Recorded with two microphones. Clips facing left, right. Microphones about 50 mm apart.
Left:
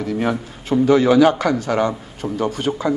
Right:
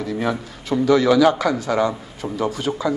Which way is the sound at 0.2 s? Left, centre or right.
Left.